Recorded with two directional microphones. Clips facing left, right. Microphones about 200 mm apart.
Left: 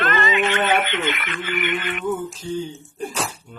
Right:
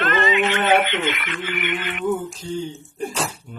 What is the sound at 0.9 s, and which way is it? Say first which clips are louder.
Speech: even; 50° left (ahead or behind).